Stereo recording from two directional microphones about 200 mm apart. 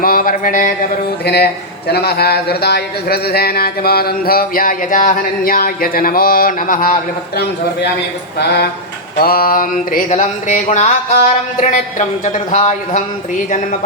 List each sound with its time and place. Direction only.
0.0 s speech: 45° left (ahead or behind)
8.4 s speech: 55° left (ahead or behind); by 13.0 s 35° left (ahead or behind)